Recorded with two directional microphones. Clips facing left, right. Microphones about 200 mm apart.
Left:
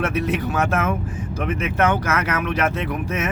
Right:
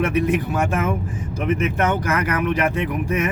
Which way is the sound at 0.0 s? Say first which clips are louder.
Right 3 dB; 15° right (ahead or behind).